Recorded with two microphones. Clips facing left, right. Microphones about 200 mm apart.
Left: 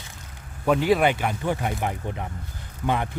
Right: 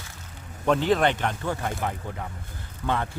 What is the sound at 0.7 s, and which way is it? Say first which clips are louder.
Speech: left 2 dB; 10° left (ahead or behind).